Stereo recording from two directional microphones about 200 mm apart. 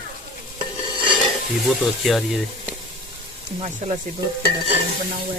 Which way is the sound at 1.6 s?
Centre (ahead or behind).